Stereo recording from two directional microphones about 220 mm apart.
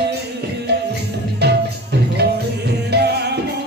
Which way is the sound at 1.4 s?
50° right (ahead or behind).